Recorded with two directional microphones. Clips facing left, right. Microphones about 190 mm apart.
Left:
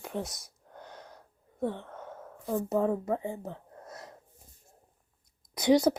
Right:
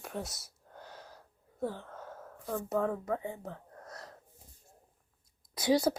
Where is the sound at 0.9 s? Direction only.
5° right (ahead or behind).